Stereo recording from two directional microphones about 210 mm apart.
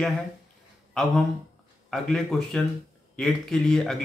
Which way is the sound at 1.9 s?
Centre (ahead or behind).